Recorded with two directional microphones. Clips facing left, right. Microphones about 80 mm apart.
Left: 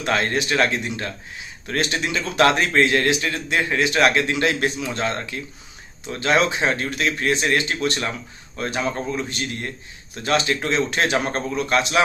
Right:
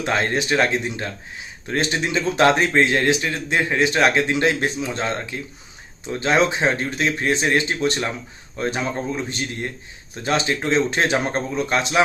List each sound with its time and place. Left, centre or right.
0.0 s speech: right